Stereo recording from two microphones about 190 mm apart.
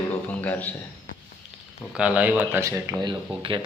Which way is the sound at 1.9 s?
5° right (ahead or behind).